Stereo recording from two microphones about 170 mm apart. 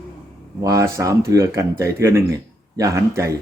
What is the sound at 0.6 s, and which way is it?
A man's voice, 20° right (ahead or behind).